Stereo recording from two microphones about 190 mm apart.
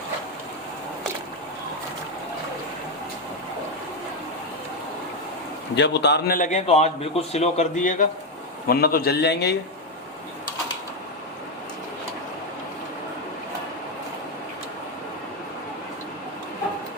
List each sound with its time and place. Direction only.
5.7 s a man's voice: 65° left (ahead or behind)